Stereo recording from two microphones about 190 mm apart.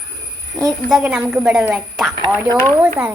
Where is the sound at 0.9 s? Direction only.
5° right (ahead or behind).